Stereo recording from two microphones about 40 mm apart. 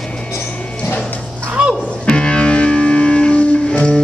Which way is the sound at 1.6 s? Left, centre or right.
Right.